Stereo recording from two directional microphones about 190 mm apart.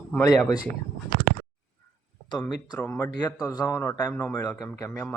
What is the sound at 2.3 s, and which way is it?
A man's voice, 20° left (ahead or behind).